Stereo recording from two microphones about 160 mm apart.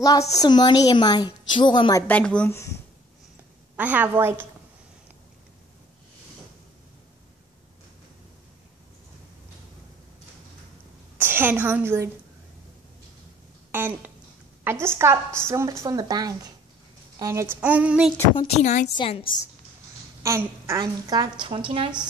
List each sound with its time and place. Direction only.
0.0 s a woman's voice: 20° left (ahead or behind)
2.0 s speech: 10° left (ahead or behind)
3.7 s a woman's voice: 10° right (ahead or behind)
11.1 s a woman's voice: 15° right (ahead or behind)
13.7 s a woman's voice: 15° right (ahead or behind)
17.6 s a woman's voice: 10° right (ahead or behind)
18.3 s a woman's voice: 30° left (ahead or behind)
18.6 s a woman's voice: 50° left (ahead or behind)
18.9 s a woman's voice: 35° left (ahead or behind)
20.2 s a woman's voice: 15° right (ahead or behind); by 21.9 s 35° right (ahead or behind)